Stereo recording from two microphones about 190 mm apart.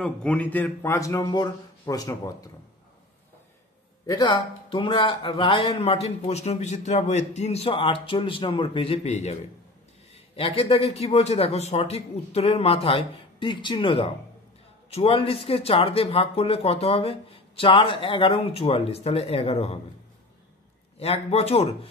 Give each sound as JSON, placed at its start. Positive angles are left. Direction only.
{"t": 0.0, "sound": "a man's voice", "side_deg": 5}
{"t": 4.0, "sound": "speech", "side_deg": 20}
{"t": 21.0, "sound": "speech", "side_deg": 30}